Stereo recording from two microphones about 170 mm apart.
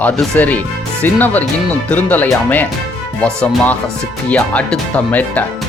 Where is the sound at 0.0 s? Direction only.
10° left (ahead or behind).